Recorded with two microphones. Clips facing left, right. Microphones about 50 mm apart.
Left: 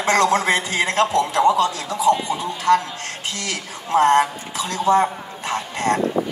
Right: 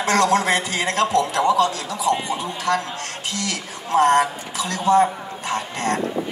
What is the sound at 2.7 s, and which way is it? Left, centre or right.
A woman's voice, left.